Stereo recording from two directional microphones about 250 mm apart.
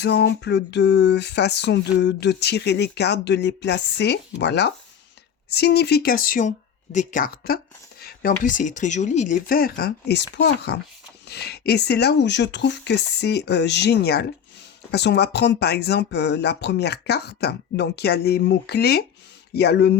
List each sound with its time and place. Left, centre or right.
0.0 s speech: left